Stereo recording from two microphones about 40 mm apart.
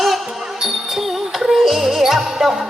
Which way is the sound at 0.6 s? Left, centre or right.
Centre.